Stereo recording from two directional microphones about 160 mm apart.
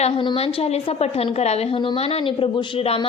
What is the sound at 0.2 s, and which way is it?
A woman's voice, 35° left (ahead or behind).